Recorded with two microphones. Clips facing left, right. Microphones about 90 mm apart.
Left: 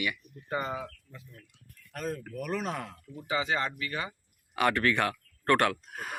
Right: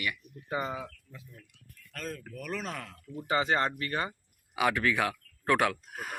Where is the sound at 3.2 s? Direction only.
40° right (ahead or behind).